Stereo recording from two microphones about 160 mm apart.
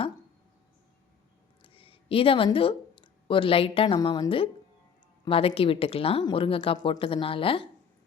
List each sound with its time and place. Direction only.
1.6 s a woman's voice: 35° left (ahead or behind)